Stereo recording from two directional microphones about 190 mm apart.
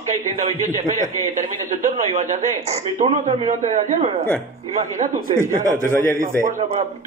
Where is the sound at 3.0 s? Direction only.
35° right (ahead or behind).